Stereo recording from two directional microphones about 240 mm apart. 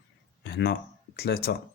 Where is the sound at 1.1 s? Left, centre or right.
Left.